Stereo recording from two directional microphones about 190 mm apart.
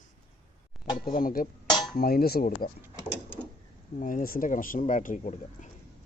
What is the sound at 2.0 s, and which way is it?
Speech, 55° left (ahead or behind).